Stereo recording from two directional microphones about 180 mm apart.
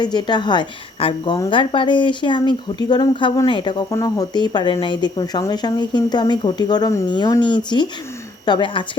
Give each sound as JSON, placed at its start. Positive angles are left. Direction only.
{"t": 0.0, "sound": "a woman's voice", "side_deg": 25}